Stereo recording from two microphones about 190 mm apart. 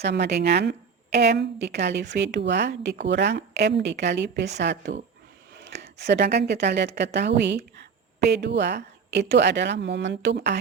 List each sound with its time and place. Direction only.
0.0 s speech: 60° right (ahead or behind)